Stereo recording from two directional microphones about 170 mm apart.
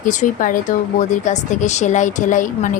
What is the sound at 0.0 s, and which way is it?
Speech, 50° left (ahead or behind).